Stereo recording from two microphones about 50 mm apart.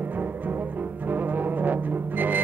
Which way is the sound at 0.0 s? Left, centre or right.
Right.